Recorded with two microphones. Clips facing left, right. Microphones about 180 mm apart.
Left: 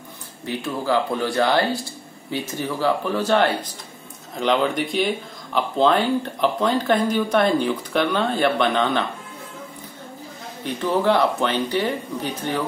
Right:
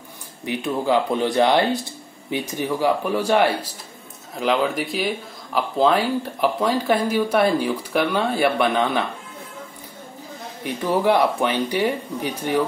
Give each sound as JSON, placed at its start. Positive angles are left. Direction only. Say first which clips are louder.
{"t": 0.5, "sound": "speech", "louder": "right 2 dB", "side_deg": -15}
{"t": 10.6, "sound": "speech", "louder": "even", "side_deg": -10}